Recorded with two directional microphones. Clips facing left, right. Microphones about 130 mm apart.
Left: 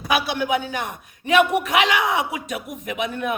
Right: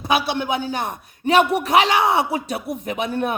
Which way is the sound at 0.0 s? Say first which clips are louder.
Right 1 dB; 25° right (ahead or behind).